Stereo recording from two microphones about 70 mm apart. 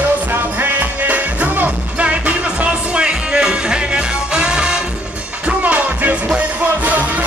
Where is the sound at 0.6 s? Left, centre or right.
Right.